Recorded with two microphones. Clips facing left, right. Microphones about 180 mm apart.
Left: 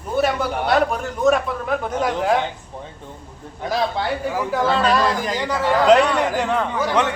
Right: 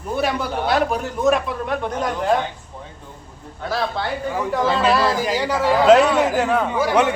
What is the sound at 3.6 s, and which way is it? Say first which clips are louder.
Speech: left 2 dB; 15° left (ahead or behind).